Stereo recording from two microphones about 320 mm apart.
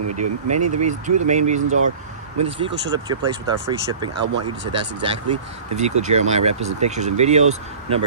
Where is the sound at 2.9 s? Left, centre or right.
Centre.